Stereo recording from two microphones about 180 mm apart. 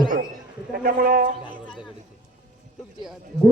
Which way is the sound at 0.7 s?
50° right (ahead or behind).